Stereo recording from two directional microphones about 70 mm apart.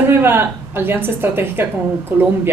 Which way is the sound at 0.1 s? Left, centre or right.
Right.